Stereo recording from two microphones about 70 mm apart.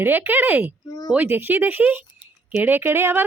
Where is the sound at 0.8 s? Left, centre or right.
Left.